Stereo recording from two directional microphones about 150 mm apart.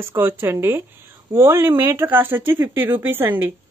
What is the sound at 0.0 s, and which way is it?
Speech, 15° right (ahead or behind).